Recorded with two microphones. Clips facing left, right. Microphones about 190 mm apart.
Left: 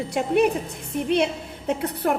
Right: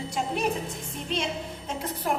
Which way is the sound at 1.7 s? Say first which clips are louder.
Left 9 dB; 60° left (ahead or behind).